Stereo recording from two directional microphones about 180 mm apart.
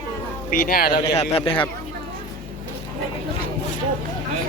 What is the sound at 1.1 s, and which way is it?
Speech, 35° left (ahead or behind).